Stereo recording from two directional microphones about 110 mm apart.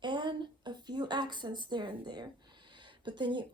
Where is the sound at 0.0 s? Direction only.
45° right (ahead or behind).